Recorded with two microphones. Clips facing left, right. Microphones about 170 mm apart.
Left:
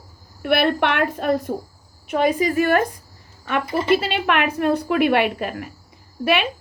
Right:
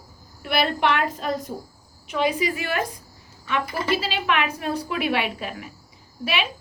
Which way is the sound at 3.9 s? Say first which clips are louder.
Left 4 dB; 55° left (ahead or behind).